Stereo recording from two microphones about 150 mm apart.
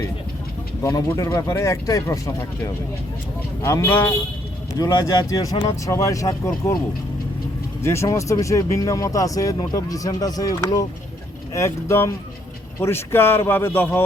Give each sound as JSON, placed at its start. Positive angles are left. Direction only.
{"t": 0.8, "sound": "speech", "side_deg": 20}
{"t": 7.8, "sound": "speech", "side_deg": 20}